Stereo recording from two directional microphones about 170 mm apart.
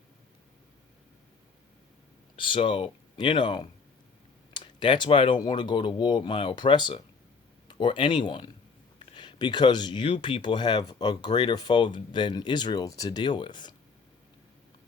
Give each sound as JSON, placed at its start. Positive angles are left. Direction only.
{"t": 2.3, "sound": "speech", "side_deg": 30}